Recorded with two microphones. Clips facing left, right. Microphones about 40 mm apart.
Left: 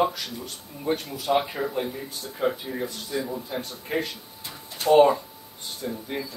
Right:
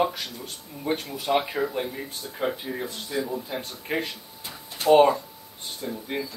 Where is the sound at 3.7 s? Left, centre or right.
Right.